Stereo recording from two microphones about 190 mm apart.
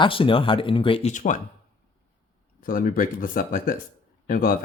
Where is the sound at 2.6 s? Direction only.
45° left (ahead or behind).